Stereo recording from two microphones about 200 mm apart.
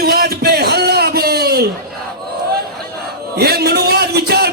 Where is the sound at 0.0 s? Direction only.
50° right (ahead or behind).